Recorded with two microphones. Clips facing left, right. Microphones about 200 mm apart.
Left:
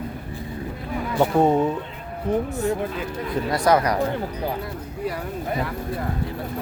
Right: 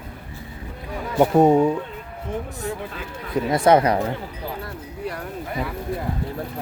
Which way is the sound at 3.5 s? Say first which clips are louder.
Right 3 dB; 25° right (ahead or behind).